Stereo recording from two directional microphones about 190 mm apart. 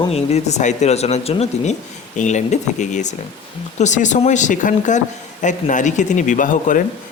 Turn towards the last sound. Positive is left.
turn(degrees=45)  # may be behind; listen again after turning